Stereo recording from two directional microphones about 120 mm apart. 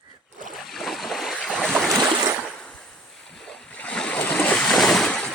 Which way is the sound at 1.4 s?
5° left (ahead or behind).